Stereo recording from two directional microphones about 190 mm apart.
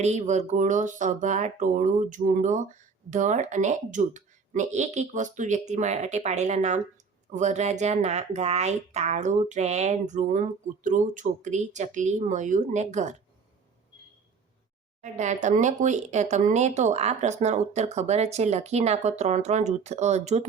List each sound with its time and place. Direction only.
0.0 s speech: 35° right (ahead or behind)
15.0 s speech: 40° right (ahead or behind)